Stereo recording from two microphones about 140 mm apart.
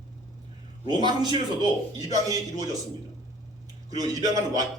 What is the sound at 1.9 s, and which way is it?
Speech, 25° right (ahead or behind).